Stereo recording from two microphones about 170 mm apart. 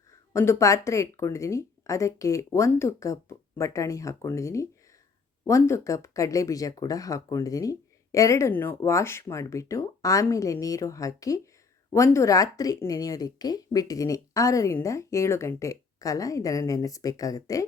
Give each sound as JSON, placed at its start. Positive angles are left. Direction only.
{"t": 0.3, "sound": "speech", "side_deg": 15}